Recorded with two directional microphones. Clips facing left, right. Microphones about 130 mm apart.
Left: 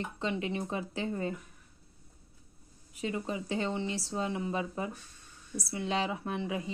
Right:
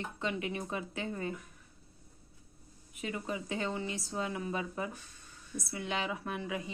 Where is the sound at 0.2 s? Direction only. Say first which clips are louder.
Left 2 dB; 30° left (ahead or behind).